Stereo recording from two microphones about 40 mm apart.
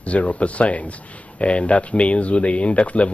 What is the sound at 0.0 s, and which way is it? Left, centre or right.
Speech, left.